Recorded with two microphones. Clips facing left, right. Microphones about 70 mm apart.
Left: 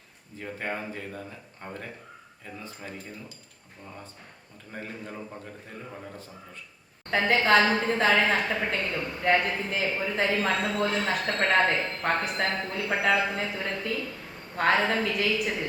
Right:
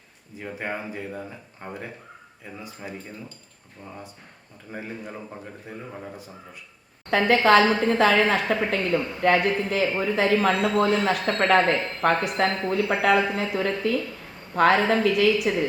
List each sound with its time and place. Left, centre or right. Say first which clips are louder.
0.3 s speech: right 2 dB; centre
4.7 s speech: right 3 dB; centre
7.1 s a man's voice: right 4 dB; right